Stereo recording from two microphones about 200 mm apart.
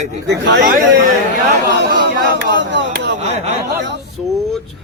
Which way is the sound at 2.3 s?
65° right (ahead or behind).